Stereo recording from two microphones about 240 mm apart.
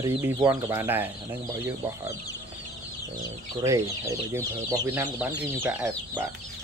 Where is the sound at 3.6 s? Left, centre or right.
Centre.